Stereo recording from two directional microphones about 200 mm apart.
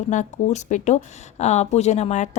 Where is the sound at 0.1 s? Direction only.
35° left (ahead or behind).